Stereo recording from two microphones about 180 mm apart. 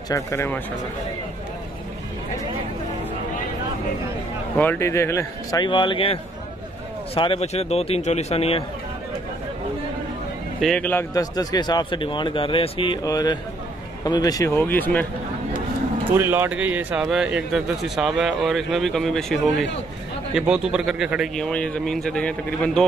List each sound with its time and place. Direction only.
0.1 s speech: 15° left (ahead or behind)
4.6 s speech: 10° left (ahead or behind); by 6.1 s 30° left (ahead or behind)
7.2 s a man's voice: 30° left (ahead or behind)
10.6 s a man's voice: 5° left (ahead or behind)
16.0 s speech: 10° right (ahead or behind); by 22.8 s 5° left (ahead or behind)